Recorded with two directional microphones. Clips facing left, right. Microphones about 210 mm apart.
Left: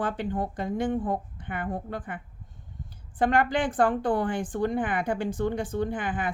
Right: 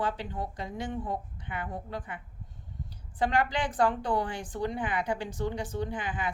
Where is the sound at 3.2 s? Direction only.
50° left (ahead or behind).